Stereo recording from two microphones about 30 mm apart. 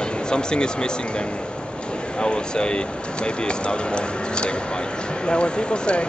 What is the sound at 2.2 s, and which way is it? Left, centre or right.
Speech, left.